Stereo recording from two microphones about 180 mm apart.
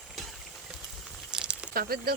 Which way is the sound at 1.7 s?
55° right (ahead or behind).